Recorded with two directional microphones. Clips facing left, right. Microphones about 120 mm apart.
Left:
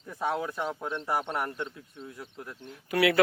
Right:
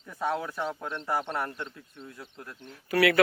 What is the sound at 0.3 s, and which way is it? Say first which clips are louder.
Speech: even; 15° left (ahead or behind).